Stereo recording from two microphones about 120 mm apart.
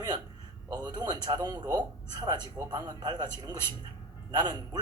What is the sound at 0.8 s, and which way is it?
Speech, 35° right (ahead or behind).